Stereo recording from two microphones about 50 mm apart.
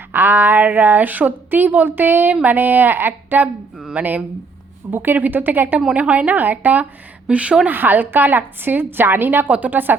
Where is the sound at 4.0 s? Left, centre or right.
Right.